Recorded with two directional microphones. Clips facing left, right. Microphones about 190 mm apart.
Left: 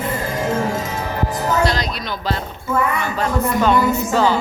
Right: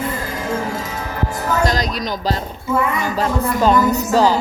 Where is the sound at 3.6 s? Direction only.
40° right (ahead or behind).